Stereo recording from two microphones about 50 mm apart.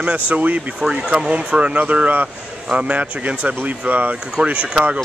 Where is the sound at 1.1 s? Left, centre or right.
Right.